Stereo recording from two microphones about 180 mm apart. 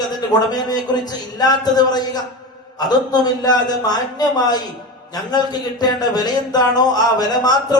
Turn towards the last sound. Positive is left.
turn(degrees=20)  # may be behind; listen again after turning